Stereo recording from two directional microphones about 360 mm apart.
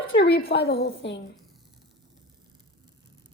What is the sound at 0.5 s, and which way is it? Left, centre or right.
Speech, left.